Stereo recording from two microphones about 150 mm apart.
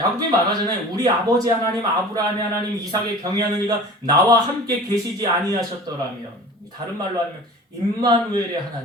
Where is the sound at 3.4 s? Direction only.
25° right (ahead or behind).